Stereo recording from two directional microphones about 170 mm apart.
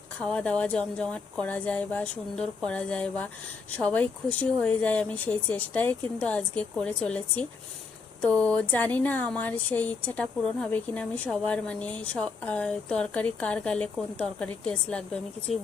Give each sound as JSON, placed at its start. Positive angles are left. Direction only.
{"t": 0.2, "sound": "speech", "side_deg": 5}